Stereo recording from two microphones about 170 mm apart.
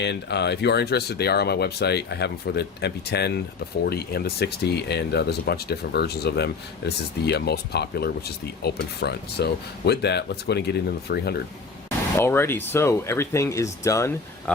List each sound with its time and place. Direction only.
0.0 s speech: 80° left
12.2 s speech: 15° left (ahead or behind)